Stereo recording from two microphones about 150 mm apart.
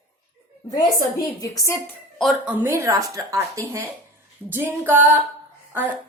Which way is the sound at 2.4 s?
15° right (ahead or behind).